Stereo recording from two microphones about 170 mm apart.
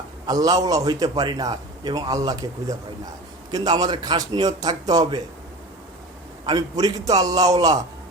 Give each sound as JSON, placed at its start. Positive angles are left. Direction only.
{"t": 0.3, "sound": "a man's voice", "side_deg": -20}
{"t": 6.4, "sound": "a man's voice", "side_deg": -25}